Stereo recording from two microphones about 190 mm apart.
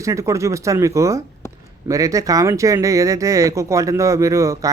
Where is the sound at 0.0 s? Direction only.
15° right (ahead or behind).